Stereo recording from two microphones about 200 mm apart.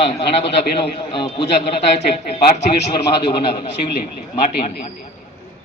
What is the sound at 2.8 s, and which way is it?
Speech, 30° left (ahead or behind).